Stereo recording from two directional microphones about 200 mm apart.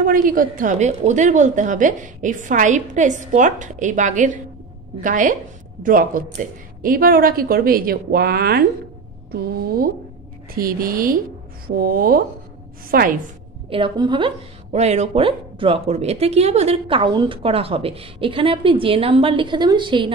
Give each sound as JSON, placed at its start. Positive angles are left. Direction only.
{"t": 0.0, "sound": "a woman's voice", "side_deg": -45}
{"t": 13.7, "sound": "a woman's voice", "side_deg": -25}